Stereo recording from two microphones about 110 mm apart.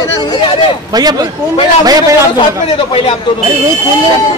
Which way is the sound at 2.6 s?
70° left (ahead or behind).